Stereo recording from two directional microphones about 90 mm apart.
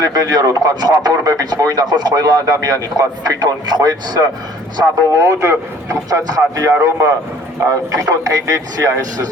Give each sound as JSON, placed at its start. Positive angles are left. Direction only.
{"t": 0.0, "sound": "speech", "side_deg": -45}
{"t": 5.1, "sound": "a man's voice", "side_deg": -35}